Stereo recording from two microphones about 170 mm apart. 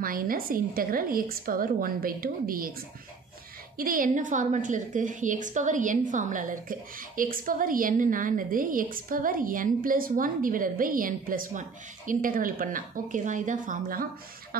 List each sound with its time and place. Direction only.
0.0 s a woman's voice: 55° right (ahead or behind)
3.7 s a woman's voice: 55° right (ahead or behind)